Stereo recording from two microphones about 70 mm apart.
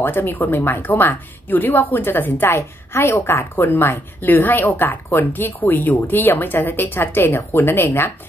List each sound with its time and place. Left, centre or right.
0.0 s speech: left